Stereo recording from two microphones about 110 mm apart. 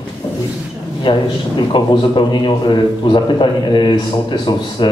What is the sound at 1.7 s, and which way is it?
A man's voice, 45° left (ahead or behind).